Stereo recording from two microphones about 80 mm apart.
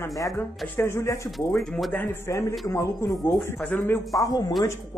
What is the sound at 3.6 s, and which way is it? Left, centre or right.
Speech, left.